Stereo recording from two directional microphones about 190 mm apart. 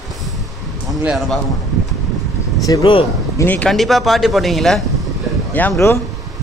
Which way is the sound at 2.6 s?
20° left (ahead or behind).